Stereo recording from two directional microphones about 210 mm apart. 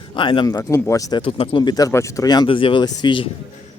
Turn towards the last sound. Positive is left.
turn(degrees=20)  # may be behind; listen again after turning